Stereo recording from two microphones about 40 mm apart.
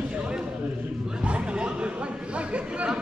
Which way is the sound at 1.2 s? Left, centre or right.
Right.